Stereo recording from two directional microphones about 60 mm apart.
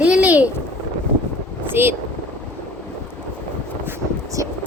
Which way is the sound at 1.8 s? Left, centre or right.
Right.